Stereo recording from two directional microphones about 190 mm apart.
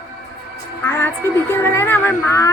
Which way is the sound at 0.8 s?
10° left (ahead or behind).